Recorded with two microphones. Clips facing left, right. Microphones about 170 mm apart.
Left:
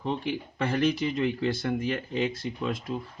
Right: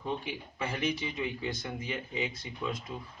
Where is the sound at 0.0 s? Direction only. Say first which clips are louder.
Left 6 dB; 70° left (ahead or behind).